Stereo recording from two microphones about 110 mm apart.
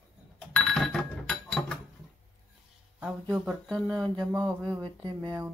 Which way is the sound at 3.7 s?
5° left (ahead or behind).